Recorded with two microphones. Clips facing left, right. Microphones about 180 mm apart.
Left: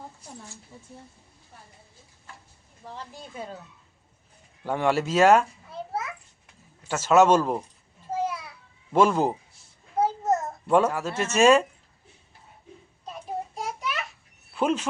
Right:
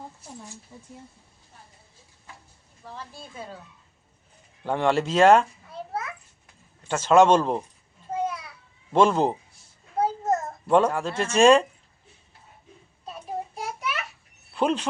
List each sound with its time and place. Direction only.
2.8 s speech: 20° left (ahead or behind)
4.6 s a child's voice: 10° left (ahead or behind)
6.8 s speech: 5° left (ahead or behind)
9.0 s a child's voice: 5° left (ahead or behind)
13.1 s child singing: centre (ahead or behind)
14.5 s speech: 5° left (ahead or behind)